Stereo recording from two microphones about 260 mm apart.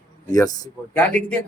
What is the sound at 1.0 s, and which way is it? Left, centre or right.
Speech, centre.